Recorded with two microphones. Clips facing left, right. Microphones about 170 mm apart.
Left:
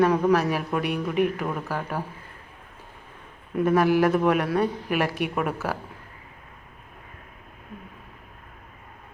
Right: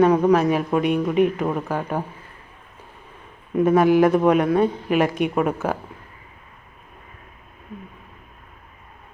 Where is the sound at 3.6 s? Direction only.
20° right (ahead or behind).